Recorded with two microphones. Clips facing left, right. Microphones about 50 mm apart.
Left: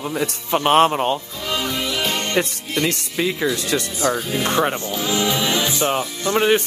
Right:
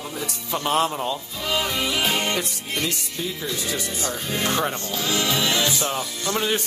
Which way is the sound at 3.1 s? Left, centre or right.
Left.